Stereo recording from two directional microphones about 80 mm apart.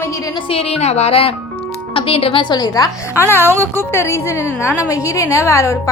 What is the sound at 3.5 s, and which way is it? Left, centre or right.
Speech, right.